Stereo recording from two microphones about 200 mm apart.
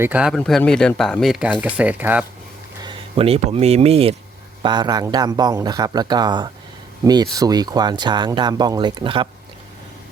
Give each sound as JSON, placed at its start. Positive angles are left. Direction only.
{"t": 0.0, "sound": "speech", "side_deg": -5}
{"t": 2.8, "sound": "speech", "side_deg": -30}